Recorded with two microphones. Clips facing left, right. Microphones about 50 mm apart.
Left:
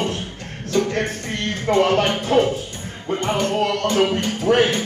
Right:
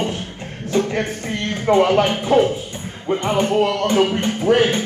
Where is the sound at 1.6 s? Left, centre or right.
Centre.